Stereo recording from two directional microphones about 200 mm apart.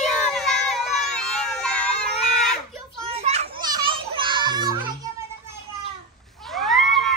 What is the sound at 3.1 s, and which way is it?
Children playing, 30° right (ahead or behind).